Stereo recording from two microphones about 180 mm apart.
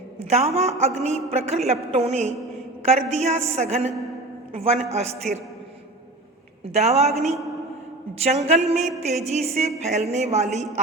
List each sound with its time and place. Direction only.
0.2 s a woman's voice: 35° right (ahead or behind)
6.7 s a woman's voice: 35° right (ahead or behind)